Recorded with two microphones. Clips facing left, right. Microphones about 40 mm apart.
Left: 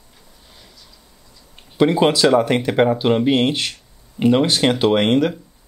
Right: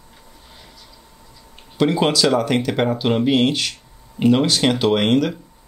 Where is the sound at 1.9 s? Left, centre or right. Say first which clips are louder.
Left 2 dB; centre.